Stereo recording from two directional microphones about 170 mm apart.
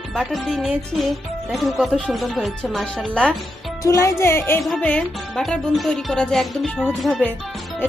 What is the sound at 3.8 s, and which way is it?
Speech, 20° left (ahead or behind).